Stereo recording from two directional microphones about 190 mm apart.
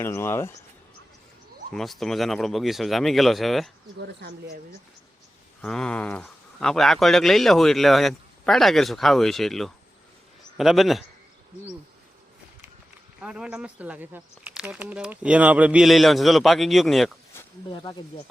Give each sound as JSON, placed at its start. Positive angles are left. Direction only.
{"t": 0.0, "sound": "speech", "side_deg": 15}
{"t": 1.7, "sound": "a man's voice", "side_deg": 0}
{"t": 5.6, "sound": "a man's voice", "side_deg": 5}
{"t": 13.1, "sound": "a man's voice", "side_deg": -5}
{"t": 17.3, "sound": "a sound", "side_deg": 10}
{"t": 17.7, "sound": "speech", "side_deg": 25}